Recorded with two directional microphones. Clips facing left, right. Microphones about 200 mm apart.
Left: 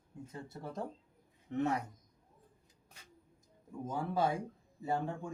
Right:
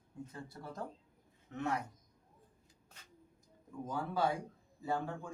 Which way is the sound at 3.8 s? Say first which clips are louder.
Left 1 dB; 20° left (ahead or behind).